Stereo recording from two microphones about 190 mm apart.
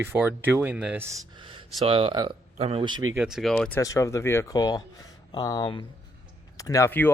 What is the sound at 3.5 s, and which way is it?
Speech, 10° left (ahead or behind).